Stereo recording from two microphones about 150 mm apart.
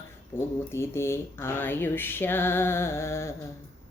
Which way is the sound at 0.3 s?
15° left (ahead or behind).